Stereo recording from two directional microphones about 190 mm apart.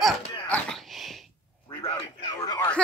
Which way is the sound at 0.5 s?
5° left (ahead or behind).